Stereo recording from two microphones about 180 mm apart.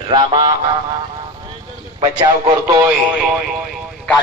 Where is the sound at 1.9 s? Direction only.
30° right (ahead or behind).